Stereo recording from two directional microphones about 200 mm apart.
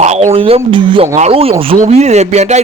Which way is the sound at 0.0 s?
35° right (ahead or behind).